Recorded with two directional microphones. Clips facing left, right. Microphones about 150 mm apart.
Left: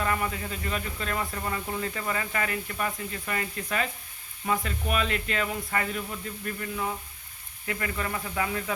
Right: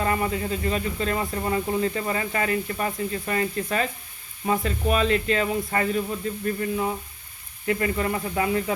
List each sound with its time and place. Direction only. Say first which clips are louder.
0.0 s speech: right 4 dB; 30° right (ahead or behind)